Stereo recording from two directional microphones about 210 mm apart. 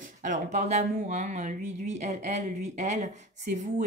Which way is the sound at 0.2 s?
35° right (ahead or behind).